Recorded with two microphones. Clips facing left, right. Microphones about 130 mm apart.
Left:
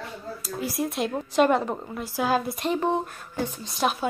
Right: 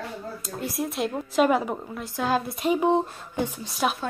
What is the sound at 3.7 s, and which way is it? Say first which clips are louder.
Speech: left 2 dB; centre (ahead or behind).